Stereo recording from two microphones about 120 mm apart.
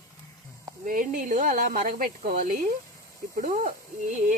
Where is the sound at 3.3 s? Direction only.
90° right.